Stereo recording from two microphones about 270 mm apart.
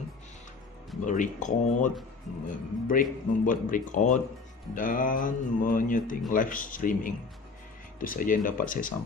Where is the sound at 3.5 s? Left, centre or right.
Left.